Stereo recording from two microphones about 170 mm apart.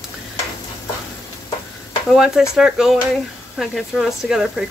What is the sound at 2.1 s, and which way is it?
Speech, 5° right (ahead or behind).